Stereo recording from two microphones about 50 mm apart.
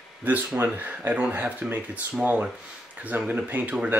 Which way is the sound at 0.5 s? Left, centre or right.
Right.